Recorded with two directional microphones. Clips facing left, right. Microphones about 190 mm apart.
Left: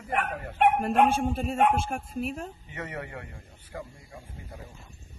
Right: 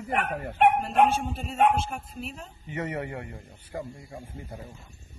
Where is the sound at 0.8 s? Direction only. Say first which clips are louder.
Even; 50° left (ahead or behind).